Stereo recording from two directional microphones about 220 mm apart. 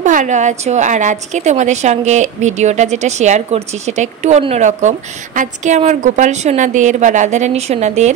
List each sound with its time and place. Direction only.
0.0 s a woman's voice: 35° right (ahead or behind)